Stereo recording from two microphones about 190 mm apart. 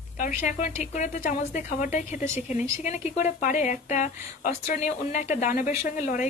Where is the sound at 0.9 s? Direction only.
40° left (ahead or behind).